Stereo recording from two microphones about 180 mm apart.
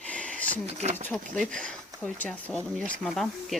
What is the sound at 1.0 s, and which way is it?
Speech, 5° left (ahead or behind).